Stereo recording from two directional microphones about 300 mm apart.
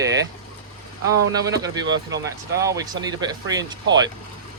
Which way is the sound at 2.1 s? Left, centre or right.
Centre.